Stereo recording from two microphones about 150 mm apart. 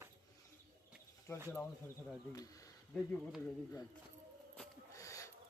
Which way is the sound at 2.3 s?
25° left (ahead or behind).